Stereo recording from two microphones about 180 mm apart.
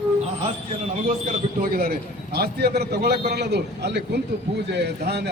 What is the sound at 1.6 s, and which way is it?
A man's voice, 55° right (ahead or behind).